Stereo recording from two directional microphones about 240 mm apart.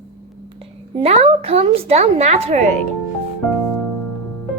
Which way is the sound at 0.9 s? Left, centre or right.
Right.